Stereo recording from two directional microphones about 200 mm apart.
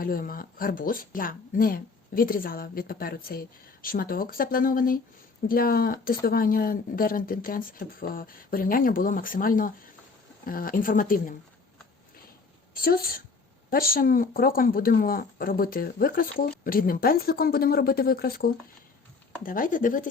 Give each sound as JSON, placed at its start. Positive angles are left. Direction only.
{"t": 0.0, "sound": "speech", "side_deg": 45}
{"t": 12.7, "sound": "a woman's voice", "side_deg": 50}